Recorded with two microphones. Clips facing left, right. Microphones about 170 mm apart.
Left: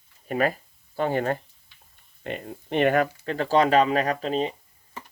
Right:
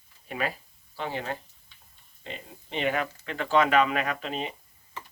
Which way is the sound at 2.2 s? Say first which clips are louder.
Left 8 dB; 55° left (ahead or behind).